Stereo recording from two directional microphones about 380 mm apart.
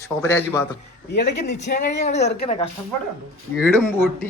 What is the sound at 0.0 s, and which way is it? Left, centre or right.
Speech, centre.